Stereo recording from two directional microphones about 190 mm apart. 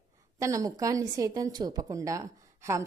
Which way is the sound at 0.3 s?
15° right (ahead or behind).